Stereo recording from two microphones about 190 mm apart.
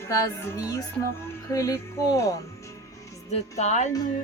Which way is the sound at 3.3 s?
35° left (ahead or behind).